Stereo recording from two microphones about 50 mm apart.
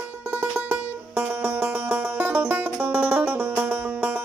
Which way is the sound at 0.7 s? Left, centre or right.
Right.